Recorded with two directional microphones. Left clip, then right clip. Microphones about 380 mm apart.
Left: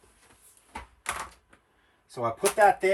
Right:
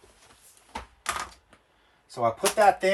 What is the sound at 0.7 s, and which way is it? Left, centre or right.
Typewriter, centre.